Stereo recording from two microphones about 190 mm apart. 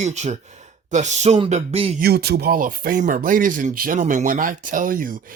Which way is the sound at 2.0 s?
55° right (ahead or behind).